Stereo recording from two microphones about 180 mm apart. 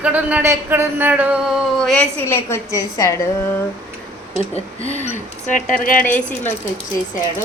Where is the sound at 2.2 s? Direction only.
15° left (ahead or behind).